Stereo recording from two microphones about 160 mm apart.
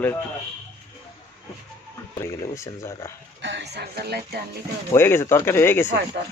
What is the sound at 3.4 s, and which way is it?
Speech, 90° right.